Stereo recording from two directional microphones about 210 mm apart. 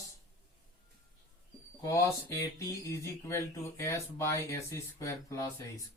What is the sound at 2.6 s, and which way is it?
Speech, 15° left (ahead or behind).